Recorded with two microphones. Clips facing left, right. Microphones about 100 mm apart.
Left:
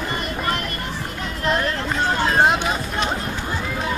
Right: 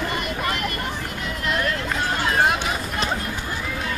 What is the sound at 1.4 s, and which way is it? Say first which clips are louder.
Run: left 3 dB; 35° left (ahead or behind).